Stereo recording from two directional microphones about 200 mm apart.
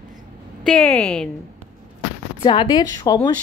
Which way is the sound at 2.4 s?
20° left (ahead or behind).